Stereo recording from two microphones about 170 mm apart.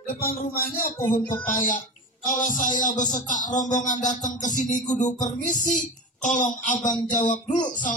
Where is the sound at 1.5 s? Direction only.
50° left (ahead or behind).